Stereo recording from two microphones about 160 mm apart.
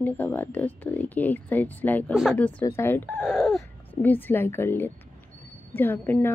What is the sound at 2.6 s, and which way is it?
Speech, 15° left (ahead or behind).